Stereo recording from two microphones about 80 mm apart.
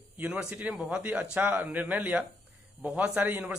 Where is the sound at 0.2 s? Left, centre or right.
Centre.